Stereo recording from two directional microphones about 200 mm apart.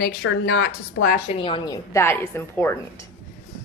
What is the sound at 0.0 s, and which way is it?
Speech, 55° left (ahead or behind).